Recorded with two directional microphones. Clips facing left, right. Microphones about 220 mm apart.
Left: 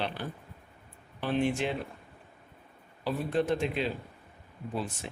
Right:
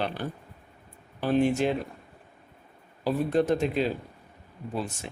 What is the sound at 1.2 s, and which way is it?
Speech, 40° right (ahead or behind).